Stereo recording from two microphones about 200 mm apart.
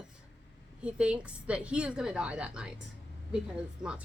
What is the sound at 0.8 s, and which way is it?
A woman's voice, 5° right (ahead or behind).